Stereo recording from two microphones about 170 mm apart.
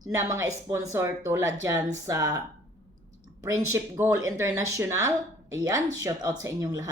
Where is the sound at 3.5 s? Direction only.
15° right (ahead or behind).